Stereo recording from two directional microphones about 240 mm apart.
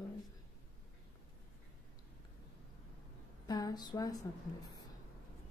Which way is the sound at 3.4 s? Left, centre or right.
Centre.